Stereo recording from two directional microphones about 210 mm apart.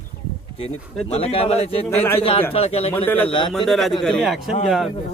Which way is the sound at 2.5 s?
30° left (ahead or behind).